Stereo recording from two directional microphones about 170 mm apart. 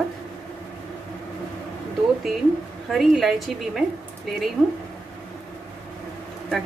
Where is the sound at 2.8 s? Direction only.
Centre (ahead or behind).